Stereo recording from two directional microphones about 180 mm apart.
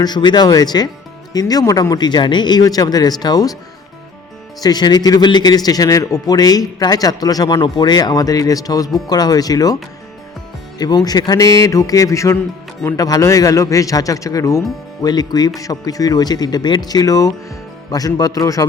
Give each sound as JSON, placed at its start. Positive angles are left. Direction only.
{"t": 0.0, "sound": "speech", "side_deg": 25}
{"t": 4.6, "sound": "speech", "side_deg": 25}
{"t": 10.8, "sound": "speech", "side_deg": 20}